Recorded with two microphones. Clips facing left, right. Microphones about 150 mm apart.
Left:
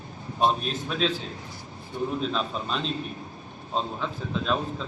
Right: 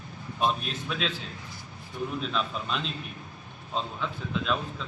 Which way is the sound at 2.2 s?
35° left (ahead or behind).